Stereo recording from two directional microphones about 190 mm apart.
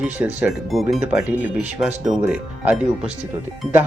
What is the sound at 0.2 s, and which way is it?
Speech, 10° right (ahead or behind).